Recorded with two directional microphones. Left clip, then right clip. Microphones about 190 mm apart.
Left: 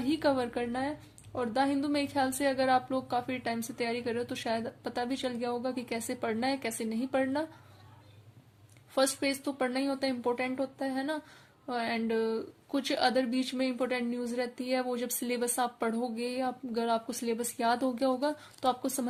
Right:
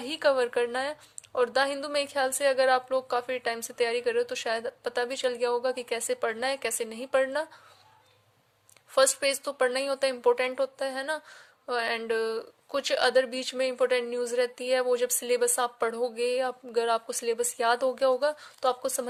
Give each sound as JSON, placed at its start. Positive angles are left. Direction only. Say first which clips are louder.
{"t": 0.0, "sound": "speech", "louder": "right 4 dB", "side_deg": -40}
{"t": 9.0, "sound": "speech", "louder": "right 5 dB", "side_deg": -40}